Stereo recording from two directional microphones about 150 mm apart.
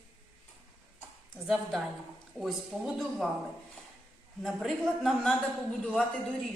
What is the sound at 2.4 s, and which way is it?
Speech, centre (ahead or behind).